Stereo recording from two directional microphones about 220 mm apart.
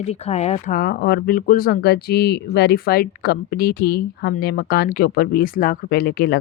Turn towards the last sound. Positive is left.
turn(degrees=45)  # may be behind; listen again after turning